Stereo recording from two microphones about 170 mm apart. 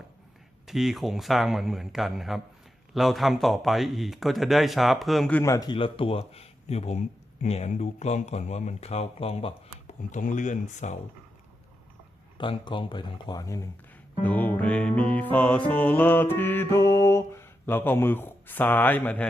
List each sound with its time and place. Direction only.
0.7 s speech: centre (ahead or behind)
5.4 s speech: 20° left (ahead or behind); by 10.9 s 45° left (ahead or behind)
12.4 s speech: 30° left (ahead or behind)
14.2 s music: 10° left (ahead or behind)